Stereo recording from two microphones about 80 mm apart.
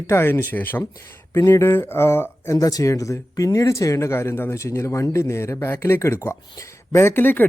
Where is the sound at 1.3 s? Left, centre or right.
Left.